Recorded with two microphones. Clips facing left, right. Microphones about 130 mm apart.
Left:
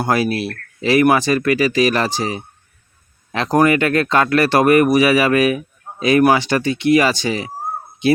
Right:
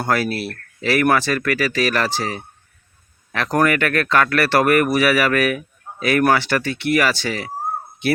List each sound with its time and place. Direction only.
0.1 s speech: 15° left (ahead or behind)